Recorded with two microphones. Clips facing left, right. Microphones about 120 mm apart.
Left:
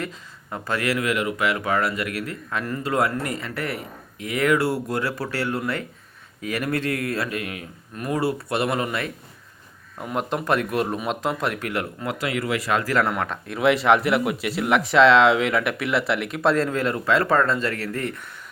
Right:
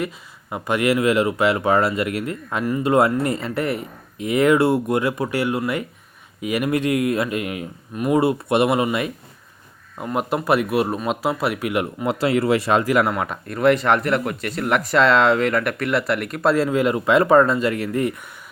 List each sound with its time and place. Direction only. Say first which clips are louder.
0.5 s speech: right 5 dB; 20° right (ahead or behind)
12.2 s speech: right 7 dB; 30° right (ahead or behind); by 18.1 s 15° right (ahead or behind)